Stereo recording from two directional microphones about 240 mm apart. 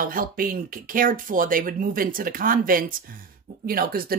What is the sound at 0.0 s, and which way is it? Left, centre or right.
A woman's voice, right.